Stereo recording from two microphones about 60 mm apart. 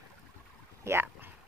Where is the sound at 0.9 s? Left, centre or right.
Right.